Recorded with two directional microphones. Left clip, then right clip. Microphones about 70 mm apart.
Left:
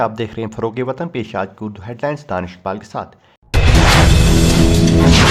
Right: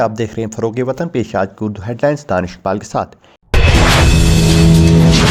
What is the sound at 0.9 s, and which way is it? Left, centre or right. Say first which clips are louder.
Speech: right 5 dB; right.